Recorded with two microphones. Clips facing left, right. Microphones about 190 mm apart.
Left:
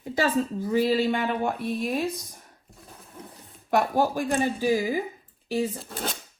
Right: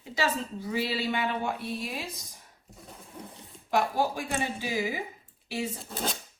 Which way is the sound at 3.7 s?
55° left (ahead or behind).